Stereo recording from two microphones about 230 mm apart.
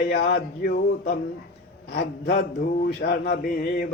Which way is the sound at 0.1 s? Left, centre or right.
Left.